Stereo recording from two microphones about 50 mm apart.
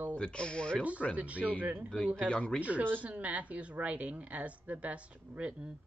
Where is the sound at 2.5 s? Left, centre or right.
Right.